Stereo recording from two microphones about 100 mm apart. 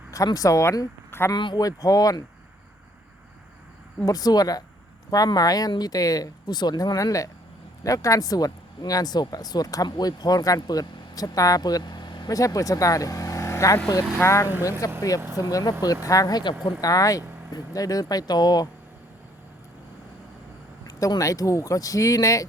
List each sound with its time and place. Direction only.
0.3 s speech: 35° left (ahead or behind)
1.3 s speech: 45° left (ahead or behind)
4.0 s speech: 40° left (ahead or behind)
16.8 s speech: 35° left (ahead or behind)
20.8 s a sound: 45° left (ahead or behind)
21.2 s speech: 35° left (ahead or behind)